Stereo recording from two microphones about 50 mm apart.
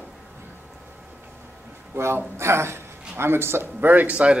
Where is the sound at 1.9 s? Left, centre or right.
Right.